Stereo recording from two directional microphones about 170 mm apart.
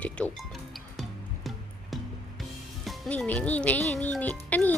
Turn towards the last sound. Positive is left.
turn(degrees=10)  # may be behind; listen again after turning